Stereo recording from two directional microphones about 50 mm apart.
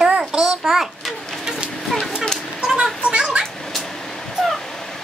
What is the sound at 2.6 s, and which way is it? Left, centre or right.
Children playing, centre.